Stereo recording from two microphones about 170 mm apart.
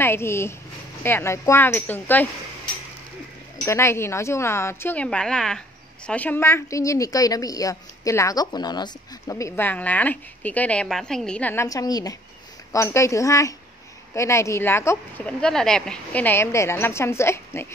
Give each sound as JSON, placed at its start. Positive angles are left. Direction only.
{"t": 0.0, "sound": "a woman's voice", "side_deg": 15}
{"t": 3.6, "sound": "a woman's voice", "side_deg": 15}